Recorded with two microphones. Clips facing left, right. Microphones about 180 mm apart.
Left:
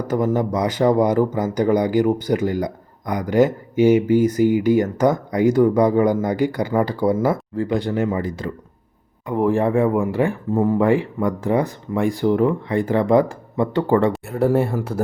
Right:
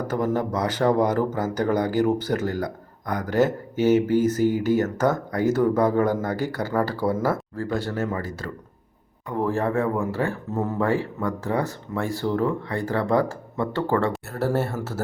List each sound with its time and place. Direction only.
0.1 s speech: 10° left (ahead or behind)